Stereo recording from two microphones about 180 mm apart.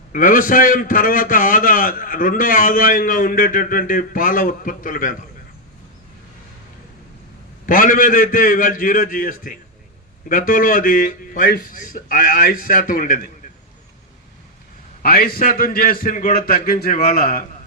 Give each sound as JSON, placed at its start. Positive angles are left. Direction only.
{"t": 0.1, "sound": "a man's voice", "side_deg": 50}
{"t": 7.7, "sound": "a man's voice", "side_deg": 50}
{"t": 15.0, "sound": "a man's voice", "side_deg": 55}